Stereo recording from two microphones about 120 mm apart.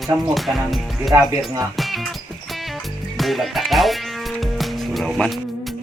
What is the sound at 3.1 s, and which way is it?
Music, centre (ahead or behind).